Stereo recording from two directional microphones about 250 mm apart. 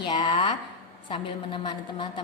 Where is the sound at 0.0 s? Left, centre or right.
Centre.